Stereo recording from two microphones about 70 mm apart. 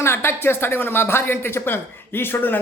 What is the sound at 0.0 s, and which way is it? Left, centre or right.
Speech, left.